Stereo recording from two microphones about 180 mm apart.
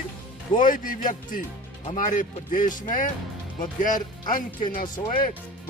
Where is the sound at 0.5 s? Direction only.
50° left (ahead or behind).